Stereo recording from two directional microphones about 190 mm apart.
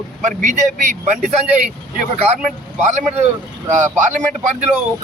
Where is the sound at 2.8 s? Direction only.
40° right (ahead or behind).